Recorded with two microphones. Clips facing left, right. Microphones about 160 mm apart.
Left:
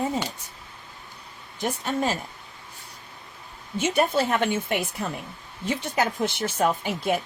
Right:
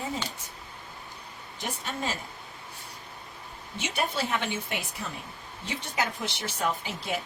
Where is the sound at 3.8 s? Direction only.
50° left (ahead or behind).